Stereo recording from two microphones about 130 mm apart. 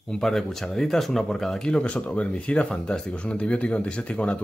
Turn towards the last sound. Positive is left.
turn(degrees=10)  # may be behind; listen again after turning